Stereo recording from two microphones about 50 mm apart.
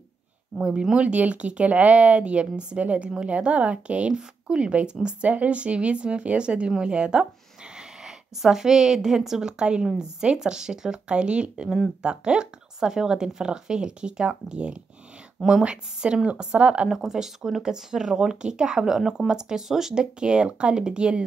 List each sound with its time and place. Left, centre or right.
0.6 s a woman's voice: centre
16.9 s speech: centre